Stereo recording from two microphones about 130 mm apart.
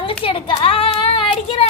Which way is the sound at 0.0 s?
45° left (ahead or behind).